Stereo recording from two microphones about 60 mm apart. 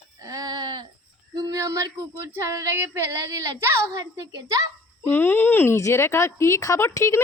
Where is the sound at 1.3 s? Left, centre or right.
Right.